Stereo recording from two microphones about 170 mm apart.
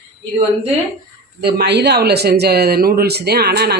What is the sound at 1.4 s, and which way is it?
Speech, 70° right (ahead or behind).